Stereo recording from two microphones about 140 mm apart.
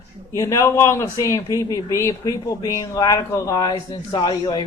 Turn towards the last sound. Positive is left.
turn(degrees=30)  # may be behind; listen again after turning